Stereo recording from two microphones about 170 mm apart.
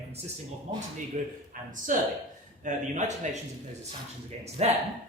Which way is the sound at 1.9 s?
50° right (ahead or behind).